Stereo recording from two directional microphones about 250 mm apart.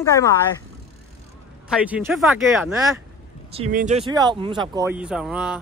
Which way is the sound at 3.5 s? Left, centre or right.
Right.